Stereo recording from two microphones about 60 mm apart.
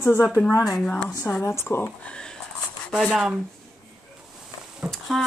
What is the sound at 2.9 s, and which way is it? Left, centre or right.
Speech, centre.